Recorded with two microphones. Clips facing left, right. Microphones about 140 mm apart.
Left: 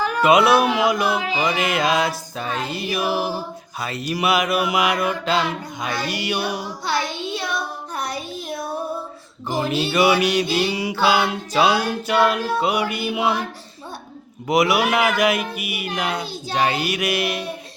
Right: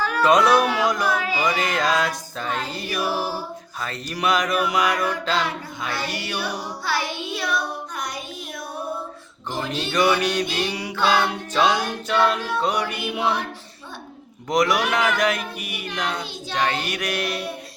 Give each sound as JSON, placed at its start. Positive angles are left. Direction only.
{"t": 0.0, "sound": "mantra", "side_deg": 15}
{"t": 7.9, "sound": "child singing", "side_deg": 30}
{"t": 9.5, "sound": "mantra", "side_deg": 5}
{"t": 14.4, "sound": "mantra", "side_deg": 10}